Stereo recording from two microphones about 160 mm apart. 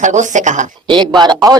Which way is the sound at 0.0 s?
50° right (ahead or behind).